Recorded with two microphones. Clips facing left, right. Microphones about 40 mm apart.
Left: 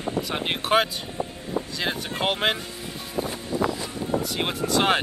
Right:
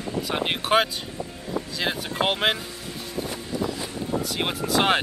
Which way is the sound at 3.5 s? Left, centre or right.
Left.